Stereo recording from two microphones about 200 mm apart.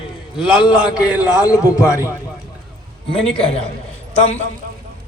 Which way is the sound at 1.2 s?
20° left (ahead or behind).